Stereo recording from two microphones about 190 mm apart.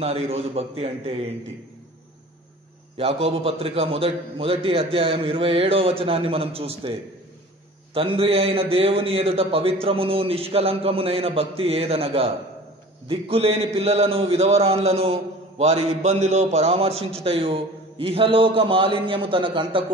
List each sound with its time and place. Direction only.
0.0 s speech: 30° right (ahead or behind)
3.0 s a man's voice: 35° right (ahead or behind)